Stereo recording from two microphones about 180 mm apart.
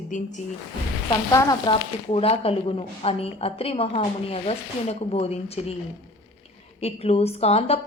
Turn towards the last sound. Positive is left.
turn(degrees=35)  # may be behind; listen again after turning